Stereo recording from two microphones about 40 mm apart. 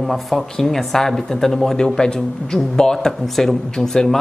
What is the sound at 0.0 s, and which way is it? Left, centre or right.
Speech, centre.